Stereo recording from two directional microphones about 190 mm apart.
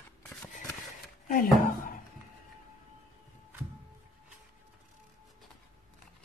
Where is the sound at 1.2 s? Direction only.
50° left (ahead or behind).